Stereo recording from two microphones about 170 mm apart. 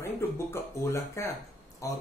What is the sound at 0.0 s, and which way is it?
Speech, 15° left (ahead or behind).